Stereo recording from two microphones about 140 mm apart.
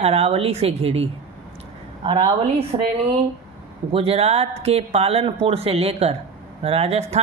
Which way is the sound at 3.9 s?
45° right (ahead or behind).